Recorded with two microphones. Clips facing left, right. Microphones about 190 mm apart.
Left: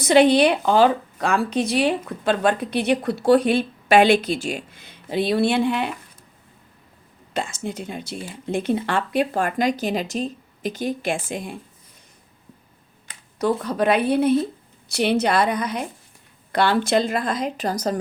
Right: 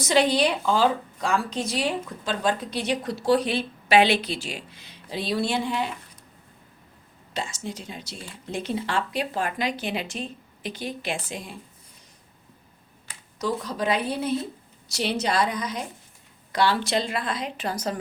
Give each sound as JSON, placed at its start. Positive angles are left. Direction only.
{"t": 0.0, "sound": "a woman's voice", "side_deg": 60}
{"t": 7.3, "sound": "speech", "side_deg": 55}
{"t": 13.4, "sound": "a woman's voice", "side_deg": 60}